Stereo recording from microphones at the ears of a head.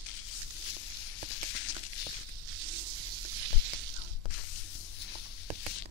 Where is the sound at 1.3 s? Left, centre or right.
Left.